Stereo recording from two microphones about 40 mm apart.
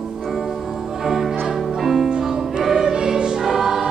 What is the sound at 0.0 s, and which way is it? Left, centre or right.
Music, centre.